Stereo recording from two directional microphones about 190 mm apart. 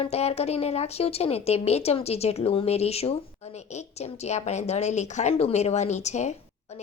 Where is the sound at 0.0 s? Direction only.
35° left (ahead or behind).